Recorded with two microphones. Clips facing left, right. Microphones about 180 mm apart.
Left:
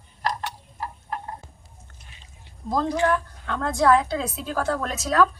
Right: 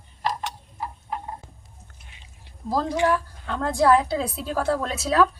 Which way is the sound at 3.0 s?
5° right (ahead or behind).